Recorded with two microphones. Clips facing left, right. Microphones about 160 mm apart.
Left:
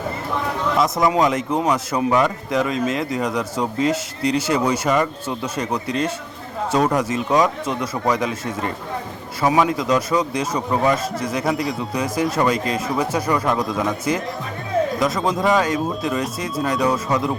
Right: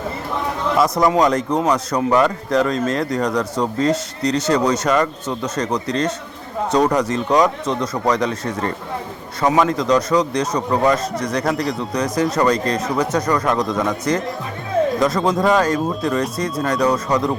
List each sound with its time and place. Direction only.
0.8 s speech: centre (ahead or behind)
12.1 s speech: 25° left (ahead or behind)
12.4 s speech: 5° left (ahead or behind)